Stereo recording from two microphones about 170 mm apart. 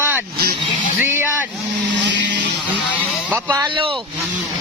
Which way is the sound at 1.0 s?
15° right (ahead or behind).